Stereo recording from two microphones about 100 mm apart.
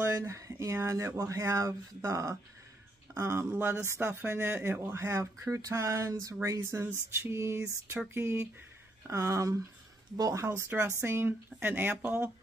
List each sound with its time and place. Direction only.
0.0 s speech: 25° right (ahead or behind)